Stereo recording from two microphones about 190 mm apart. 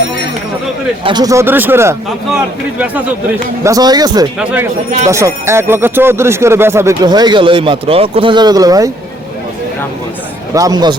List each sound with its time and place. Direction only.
1.0 s speech: 20° right (ahead or behind)
3.6 s speech: 20° right (ahead or behind)
4.4 s speech: 10° right (ahead or behind)
10.5 s speech: 20° right (ahead or behind)